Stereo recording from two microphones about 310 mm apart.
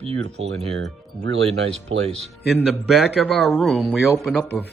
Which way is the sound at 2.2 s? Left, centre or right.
Centre.